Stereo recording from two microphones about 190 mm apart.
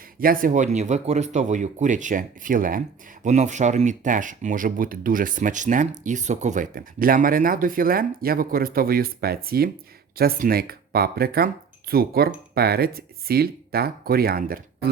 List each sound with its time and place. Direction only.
0.2 s speech: 45° right (ahead or behind)